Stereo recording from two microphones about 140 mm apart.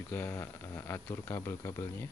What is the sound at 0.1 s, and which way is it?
Speech, 15° left (ahead or behind).